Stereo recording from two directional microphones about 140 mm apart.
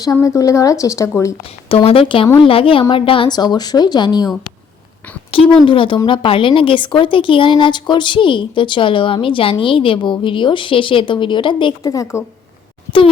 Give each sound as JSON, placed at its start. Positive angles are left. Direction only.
{"t": 0.0, "sound": "speech", "side_deg": 25}
{"t": 1.7, "sound": "speech", "side_deg": 40}
{"t": 5.3, "sound": "speech", "side_deg": 40}